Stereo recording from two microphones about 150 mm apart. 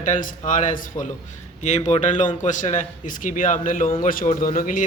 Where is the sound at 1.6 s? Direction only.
50° left (ahead or behind).